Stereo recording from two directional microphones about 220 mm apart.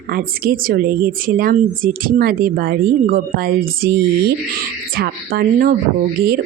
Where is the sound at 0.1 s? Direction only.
40° right (ahead or behind).